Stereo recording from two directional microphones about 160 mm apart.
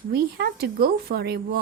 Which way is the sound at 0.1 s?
75° right (ahead or behind).